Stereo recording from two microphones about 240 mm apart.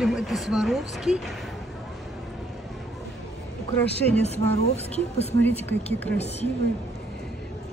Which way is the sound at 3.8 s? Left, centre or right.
Left.